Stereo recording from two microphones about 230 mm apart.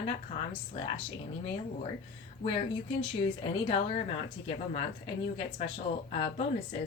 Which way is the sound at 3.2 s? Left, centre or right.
Left.